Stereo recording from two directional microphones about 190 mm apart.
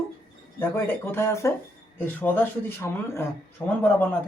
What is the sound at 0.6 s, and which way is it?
Speech, 10° left (ahead or behind).